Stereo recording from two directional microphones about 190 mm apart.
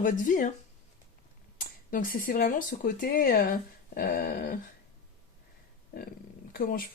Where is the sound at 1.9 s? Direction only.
50° left (ahead or behind).